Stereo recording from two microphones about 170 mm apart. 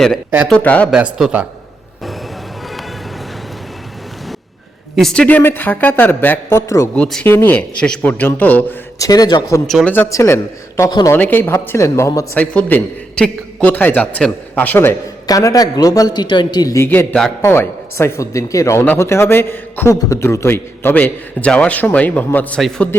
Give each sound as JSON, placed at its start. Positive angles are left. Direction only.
{"t": 0.4, "sound": "a man's voice", "side_deg": 5}
{"t": 0.9, "sound": "a man's voice", "side_deg": -5}
{"t": 4.9, "sound": "a man's voice", "side_deg": 5}
{"t": 9.0, "sound": "speech", "side_deg": 20}
{"t": 9.6, "sound": "speech", "side_deg": 0}
{"t": 9.9, "sound": "a man's voice", "side_deg": 15}